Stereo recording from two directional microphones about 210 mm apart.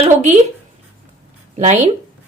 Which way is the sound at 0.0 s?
35° right (ahead or behind).